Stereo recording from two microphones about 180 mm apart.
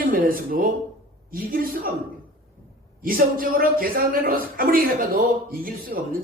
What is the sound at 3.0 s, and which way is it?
A man's voice, 55° right (ahead or behind).